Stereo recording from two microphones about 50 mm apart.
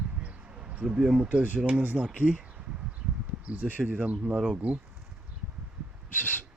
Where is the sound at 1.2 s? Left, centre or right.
Right.